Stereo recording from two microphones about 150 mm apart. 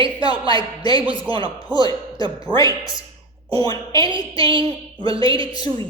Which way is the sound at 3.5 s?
25° left (ahead or behind).